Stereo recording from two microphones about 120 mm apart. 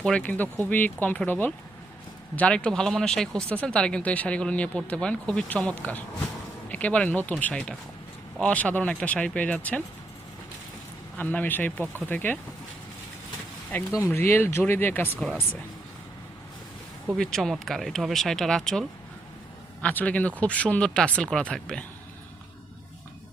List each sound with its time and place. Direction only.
0.0 s speech: 10° left (ahead or behind)
11.2 s speech: 15° left (ahead or behind)
13.9 s speech: 20° left (ahead or behind)
17.2 s speech: 5° left (ahead or behind)